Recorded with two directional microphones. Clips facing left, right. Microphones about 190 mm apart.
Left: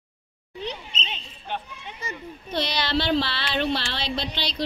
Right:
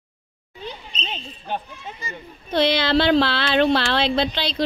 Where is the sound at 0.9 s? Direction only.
40° right (ahead or behind).